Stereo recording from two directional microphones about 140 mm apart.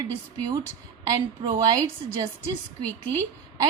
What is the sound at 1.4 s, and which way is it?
Speech, 30° right (ahead or behind).